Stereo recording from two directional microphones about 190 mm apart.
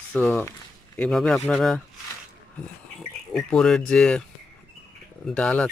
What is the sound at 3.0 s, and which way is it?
Speech, 5° left (ahead or behind).